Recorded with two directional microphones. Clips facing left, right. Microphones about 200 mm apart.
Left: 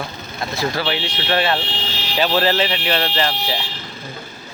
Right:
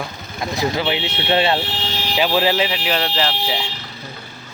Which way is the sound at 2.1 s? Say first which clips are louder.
Even; 10° right (ahead or behind).